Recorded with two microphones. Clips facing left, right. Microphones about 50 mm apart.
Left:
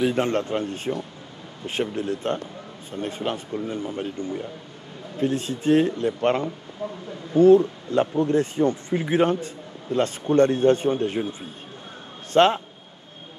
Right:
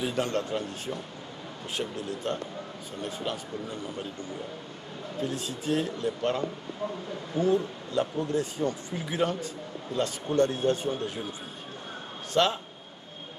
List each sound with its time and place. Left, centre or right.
0.0 s speech: left
12.3 s a man's voice: left